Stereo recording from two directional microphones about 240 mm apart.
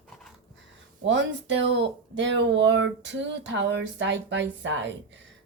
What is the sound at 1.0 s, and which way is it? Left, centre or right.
Speech, right.